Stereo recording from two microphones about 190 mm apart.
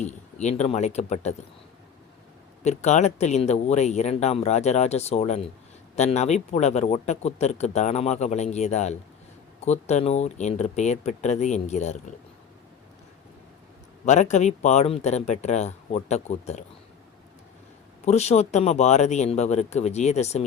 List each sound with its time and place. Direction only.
0.0 s speech: 35° left (ahead or behind)
2.6 s speech: 35° left (ahead or behind)
14.0 s speech: 40° left (ahead or behind)
18.0 s speech: 35° left (ahead or behind)